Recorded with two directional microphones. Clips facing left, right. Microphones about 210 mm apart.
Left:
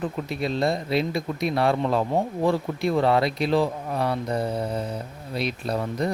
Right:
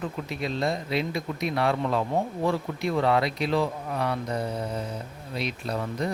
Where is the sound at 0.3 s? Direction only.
35° left (ahead or behind).